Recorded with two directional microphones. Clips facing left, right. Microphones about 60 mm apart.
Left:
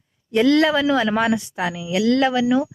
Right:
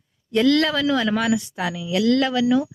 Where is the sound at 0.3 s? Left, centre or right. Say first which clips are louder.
Left 2 dB; centre.